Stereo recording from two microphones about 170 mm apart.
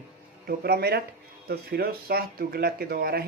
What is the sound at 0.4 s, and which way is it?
Speech, 70° right (ahead or behind).